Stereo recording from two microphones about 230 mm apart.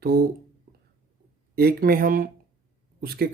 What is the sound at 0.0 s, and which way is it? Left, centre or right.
Speech, right.